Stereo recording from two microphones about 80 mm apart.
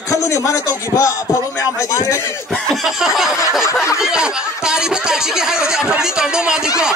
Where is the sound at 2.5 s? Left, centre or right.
Centre.